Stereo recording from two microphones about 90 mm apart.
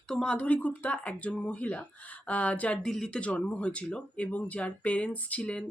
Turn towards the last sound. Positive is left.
turn(degrees=15)  # may be behind; listen again after turning